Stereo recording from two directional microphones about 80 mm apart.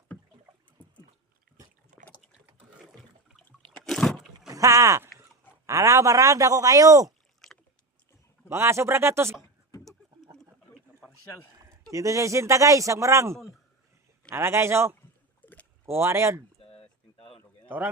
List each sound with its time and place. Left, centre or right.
2.5 s water: centre
3.7 s a sound: centre
4.4 s rowboat: right
5.6 s speech: right
7.4 s rowboat: centre
8.4 s speech: right
11.6 s speech: right
15.4 s rowboat: left
15.9 s speech: right